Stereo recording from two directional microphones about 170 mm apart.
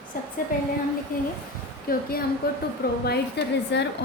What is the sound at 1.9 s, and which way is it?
Speech, 60° left (ahead or behind).